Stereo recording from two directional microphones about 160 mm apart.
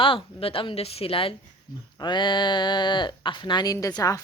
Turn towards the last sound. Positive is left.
turn(degrees=20)  # may be behind; listen again after turning